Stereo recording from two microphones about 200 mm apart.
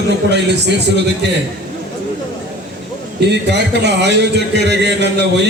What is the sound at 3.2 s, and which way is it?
A man's voice, 60° right (ahead or behind).